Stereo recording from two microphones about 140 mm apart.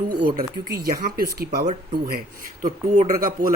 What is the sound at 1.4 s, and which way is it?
Speech, 90° right.